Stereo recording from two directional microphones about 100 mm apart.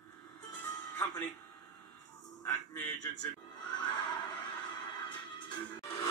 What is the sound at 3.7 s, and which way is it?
Neigh, 50° left (ahead or behind).